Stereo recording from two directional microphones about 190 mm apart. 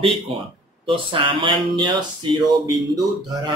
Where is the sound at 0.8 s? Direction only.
25° right (ahead or behind).